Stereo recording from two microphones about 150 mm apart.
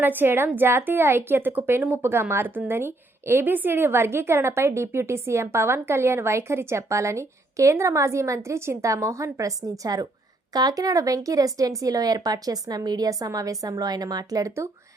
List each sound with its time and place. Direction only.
0.0 s a woman's voice: 15° right (ahead or behind)